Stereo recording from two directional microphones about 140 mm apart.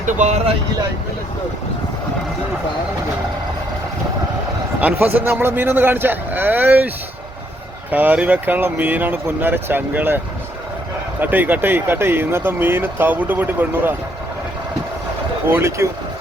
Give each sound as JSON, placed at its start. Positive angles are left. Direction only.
{"t": 0.0, "sound": "speech", "side_deg": -60}
{"t": 4.8, "sound": "speech", "side_deg": -10}
{"t": 11.2, "sound": "speech", "side_deg": -10}
{"t": 15.4, "sound": "speech", "side_deg": -20}